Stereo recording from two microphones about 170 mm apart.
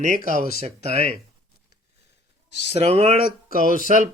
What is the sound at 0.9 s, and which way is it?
Speech, 40° right (ahead or behind).